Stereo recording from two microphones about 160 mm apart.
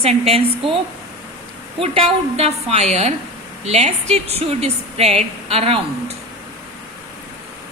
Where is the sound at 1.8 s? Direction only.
35° right (ahead or behind).